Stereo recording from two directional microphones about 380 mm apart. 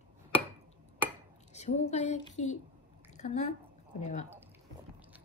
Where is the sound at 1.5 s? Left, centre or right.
Centre.